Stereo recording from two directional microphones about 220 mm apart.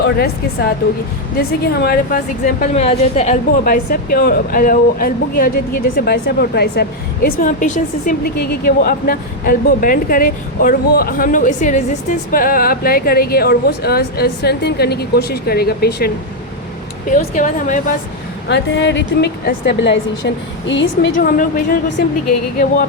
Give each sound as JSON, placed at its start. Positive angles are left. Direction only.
{"t": 0.0, "sound": "a woman's voice", "side_deg": 45}
{"t": 17.1, "sound": "a woman's voice", "side_deg": 35}
{"t": 18.4, "sound": "speech", "side_deg": 55}